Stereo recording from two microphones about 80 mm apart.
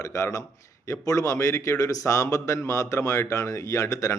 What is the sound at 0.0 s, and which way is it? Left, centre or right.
Speech, left.